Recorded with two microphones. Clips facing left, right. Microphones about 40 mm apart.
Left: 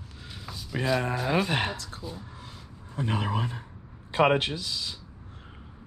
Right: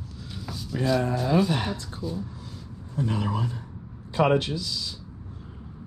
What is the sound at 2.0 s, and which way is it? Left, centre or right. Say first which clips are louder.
Speech: right 9 dB; centre.